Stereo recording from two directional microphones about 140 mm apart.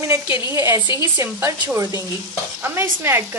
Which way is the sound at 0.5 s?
15° right (ahead or behind).